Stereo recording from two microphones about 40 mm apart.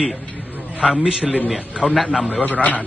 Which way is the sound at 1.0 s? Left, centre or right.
Right.